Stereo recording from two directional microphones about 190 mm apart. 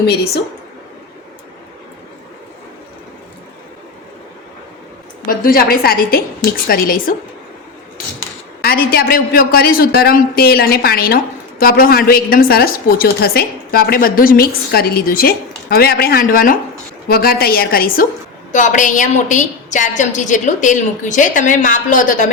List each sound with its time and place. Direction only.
5.2 s a woman's voice: 50° left (ahead or behind)
8.6 s a woman's voice: 55° left (ahead or behind)